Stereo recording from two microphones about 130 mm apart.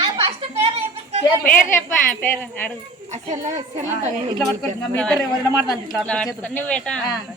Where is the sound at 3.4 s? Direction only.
65° right (ahead or behind).